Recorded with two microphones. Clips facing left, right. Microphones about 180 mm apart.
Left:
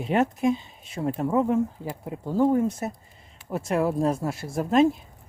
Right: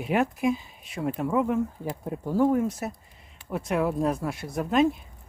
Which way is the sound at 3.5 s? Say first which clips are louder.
Left 2 dB; 25° left (ahead or behind).